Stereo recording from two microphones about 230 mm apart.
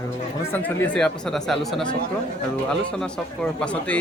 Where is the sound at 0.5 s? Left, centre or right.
Centre.